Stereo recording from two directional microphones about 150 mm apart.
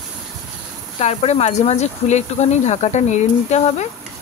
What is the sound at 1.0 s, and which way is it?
Speech, 50° left (ahead or behind).